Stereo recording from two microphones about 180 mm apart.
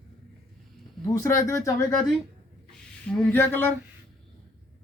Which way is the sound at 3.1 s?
5° left (ahead or behind).